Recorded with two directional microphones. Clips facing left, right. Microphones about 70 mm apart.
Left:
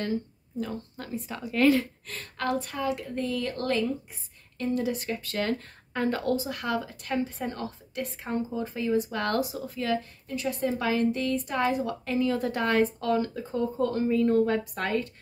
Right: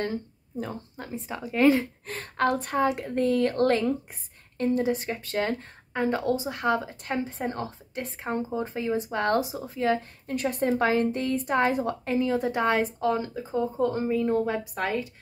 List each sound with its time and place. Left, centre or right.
0.0 s speech: right
0.9 s speech: right
2.0 s speech: right
4.7 s speech: right
10.2 s speech: right
10.7 s speech: right; by 15.0 s centre